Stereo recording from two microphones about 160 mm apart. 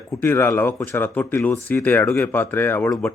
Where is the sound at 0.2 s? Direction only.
15° left (ahead or behind).